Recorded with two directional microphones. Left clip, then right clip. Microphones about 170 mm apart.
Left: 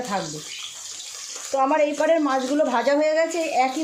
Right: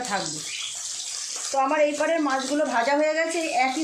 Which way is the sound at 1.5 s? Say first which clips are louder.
Left 2 dB; 65° left (ahead or behind).